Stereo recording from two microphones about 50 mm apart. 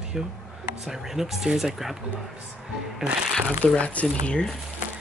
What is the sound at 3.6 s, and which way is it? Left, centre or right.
Speech, left.